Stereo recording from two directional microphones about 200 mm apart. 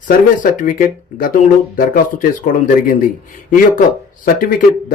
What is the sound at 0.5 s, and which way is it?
Speech, 40° left (ahead or behind).